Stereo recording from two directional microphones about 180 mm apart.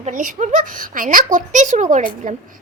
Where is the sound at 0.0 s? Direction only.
45° right (ahead or behind).